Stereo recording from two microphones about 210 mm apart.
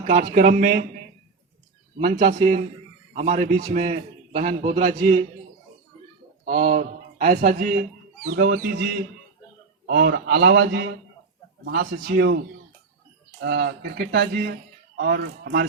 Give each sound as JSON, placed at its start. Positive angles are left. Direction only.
{"t": 0.1, "sound": "a man's voice", "side_deg": -40}
{"t": 2.0, "sound": "a man's voice", "side_deg": -30}
{"t": 6.4, "sound": "a man's voice", "side_deg": -40}
{"t": 13.4, "sound": "a man's voice", "side_deg": -50}